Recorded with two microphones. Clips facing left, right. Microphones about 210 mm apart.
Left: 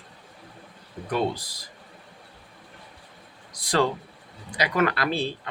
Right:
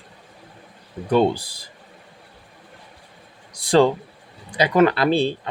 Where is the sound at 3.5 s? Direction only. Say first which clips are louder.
Right 8 dB; 30° right (ahead or behind).